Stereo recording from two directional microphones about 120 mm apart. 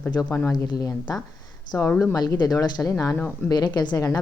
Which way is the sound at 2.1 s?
35° left (ahead or behind).